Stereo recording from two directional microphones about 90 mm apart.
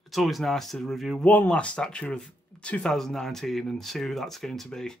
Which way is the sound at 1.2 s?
20° left (ahead or behind).